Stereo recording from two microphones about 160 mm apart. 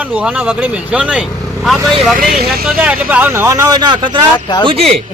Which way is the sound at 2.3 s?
75° right (ahead or behind).